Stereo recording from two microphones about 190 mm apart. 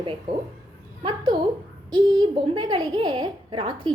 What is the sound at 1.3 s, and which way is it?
Speech, 25° right (ahead or behind).